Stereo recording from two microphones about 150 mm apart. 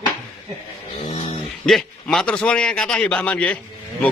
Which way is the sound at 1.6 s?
5° left (ahead or behind).